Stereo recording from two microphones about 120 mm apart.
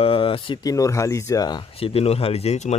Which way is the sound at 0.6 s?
30° left (ahead or behind).